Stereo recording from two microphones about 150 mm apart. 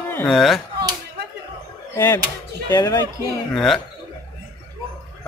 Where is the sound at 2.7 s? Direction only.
25° left (ahead or behind).